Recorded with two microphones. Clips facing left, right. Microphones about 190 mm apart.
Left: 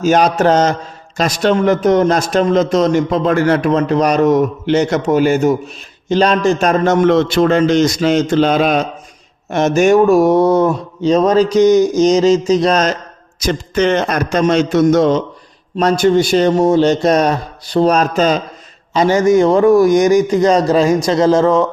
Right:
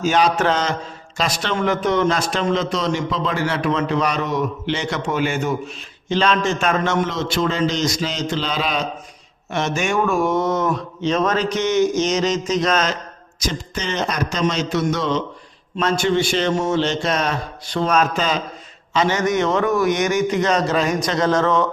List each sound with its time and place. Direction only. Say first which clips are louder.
0.0 s a man's voice: left 6 dB; 45° left (ahead or behind)
7.0 s a man's voice: left 10 dB; 60° left (ahead or behind); by 13.0 s 40° left (ahead or behind)
13.4 s a man's voice: left 11 dB; 60° left (ahead or behind); by 21.7 s 30° left (ahead or behind)